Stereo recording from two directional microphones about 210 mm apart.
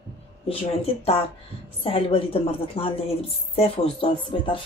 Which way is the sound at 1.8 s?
25° left (ahead or behind).